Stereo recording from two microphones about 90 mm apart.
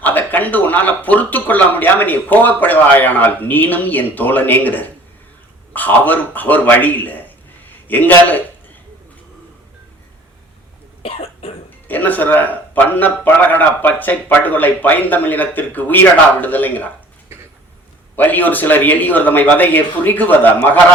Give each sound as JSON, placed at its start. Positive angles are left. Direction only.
{"t": 0.0, "sound": "a man's voice", "side_deg": 20}
{"t": 11.0, "sound": "cough", "side_deg": 90}
{"t": 11.9, "sound": "a man's voice", "side_deg": 20}
{"t": 18.2, "sound": "a man's voice", "side_deg": 20}